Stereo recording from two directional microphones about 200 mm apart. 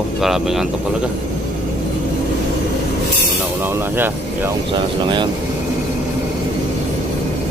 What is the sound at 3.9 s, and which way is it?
Speech, 10° right (ahead or behind).